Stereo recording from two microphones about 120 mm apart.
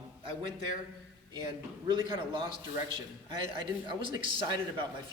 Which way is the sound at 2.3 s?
45° right (ahead or behind).